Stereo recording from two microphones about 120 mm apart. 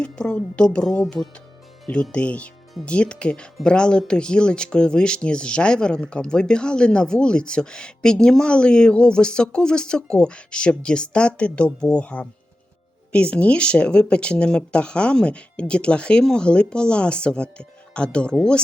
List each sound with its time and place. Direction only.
0.0 s speech: 10° left (ahead or behind)